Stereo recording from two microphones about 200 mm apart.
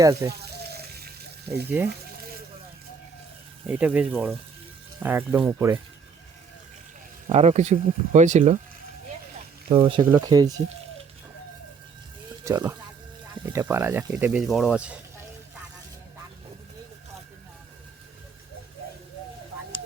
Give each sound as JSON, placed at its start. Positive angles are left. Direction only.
{"t": 0.0, "sound": "speech", "side_deg": -15}
{"t": 0.3, "sound": "water", "side_deg": -50}
{"t": 1.7, "sound": "speech", "side_deg": -10}
{"t": 3.7, "sound": "speech", "side_deg": -5}
{"t": 7.3, "sound": "speech", "side_deg": -35}
{"t": 9.6, "sound": "speech", "side_deg": -25}
{"t": 12.5, "sound": "speech", "side_deg": -15}